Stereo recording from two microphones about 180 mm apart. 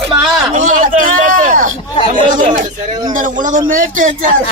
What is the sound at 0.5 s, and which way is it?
Speech, 45° right (ahead or behind).